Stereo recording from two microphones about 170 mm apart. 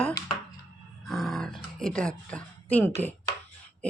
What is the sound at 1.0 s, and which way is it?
Grunt, centre (ahead or behind).